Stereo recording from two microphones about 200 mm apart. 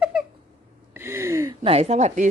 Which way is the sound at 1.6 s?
30° right (ahead or behind).